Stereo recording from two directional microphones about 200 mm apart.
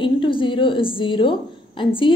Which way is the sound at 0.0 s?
25° left (ahead or behind).